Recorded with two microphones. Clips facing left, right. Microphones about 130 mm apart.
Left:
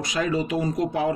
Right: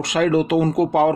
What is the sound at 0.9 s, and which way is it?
Speech, 75° right (ahead or behind).